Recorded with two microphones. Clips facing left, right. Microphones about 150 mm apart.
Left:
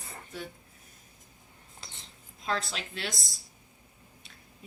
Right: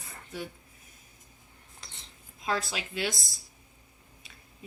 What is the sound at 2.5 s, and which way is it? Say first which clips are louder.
Speech: right 1 dB; 5° right (ahead or behind).